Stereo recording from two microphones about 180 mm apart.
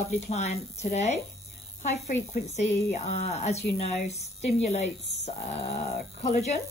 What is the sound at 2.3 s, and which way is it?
Speech, 40° left (ahead or behind).